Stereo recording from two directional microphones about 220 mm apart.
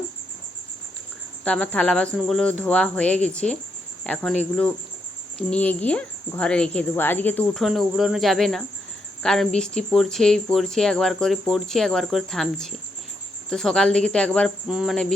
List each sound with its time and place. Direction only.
1.5 s speech: 5° left (ahead or behind)